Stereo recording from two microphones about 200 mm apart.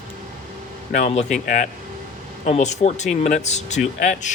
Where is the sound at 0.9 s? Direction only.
35° left (ahead or behind).